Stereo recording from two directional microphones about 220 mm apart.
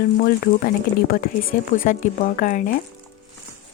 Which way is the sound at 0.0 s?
45° left (ahead or behind).